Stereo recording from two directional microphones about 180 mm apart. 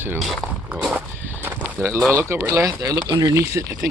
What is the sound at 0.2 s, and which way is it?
Speech, centre (ahead or behind).